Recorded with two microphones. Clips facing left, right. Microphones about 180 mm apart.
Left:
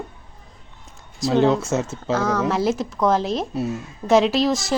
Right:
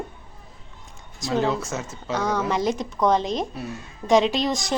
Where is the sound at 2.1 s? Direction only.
Centre (ahead or behind).